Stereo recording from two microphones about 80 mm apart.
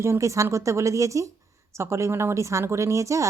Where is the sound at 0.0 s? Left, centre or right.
Right.